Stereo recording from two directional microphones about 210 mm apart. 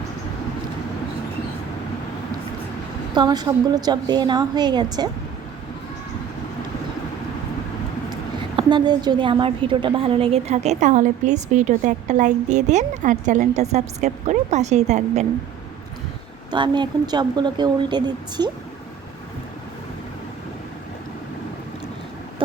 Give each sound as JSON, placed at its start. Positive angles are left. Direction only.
{"t": 3.2, "sound": "speech", "side_deg": -20}
{"t": 8.5, "sound": "a woman's voice", "side_deg": -20}
{"t": 16.5, "sound": "speech", "side_deg": -20}